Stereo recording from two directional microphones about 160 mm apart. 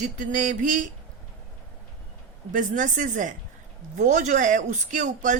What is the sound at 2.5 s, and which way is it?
Speech, 50° right (ahead or behind).